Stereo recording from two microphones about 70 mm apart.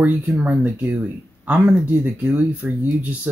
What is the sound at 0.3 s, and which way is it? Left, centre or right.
Speech, right.